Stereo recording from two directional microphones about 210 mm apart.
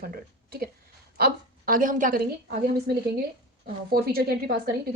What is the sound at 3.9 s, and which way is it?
Speech, 45° right (ahead or behind).